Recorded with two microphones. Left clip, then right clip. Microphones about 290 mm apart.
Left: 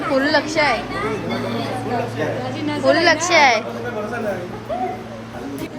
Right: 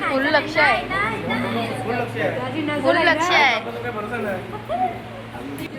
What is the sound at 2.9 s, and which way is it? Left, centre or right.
Speech, centre.